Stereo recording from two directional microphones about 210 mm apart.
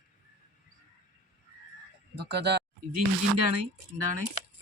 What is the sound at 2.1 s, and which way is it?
Speech, 50° right (ahead or behind).